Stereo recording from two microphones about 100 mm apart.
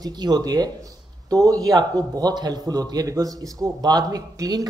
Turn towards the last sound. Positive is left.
turn(degrees=-40)  # may be behind; listen again after turning